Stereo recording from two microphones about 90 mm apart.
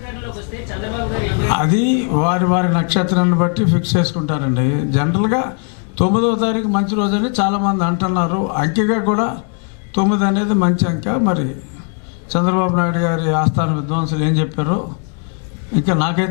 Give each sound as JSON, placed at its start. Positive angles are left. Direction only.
{"t": 0.1, "sound": "a woman's voice", "side_deg": 15}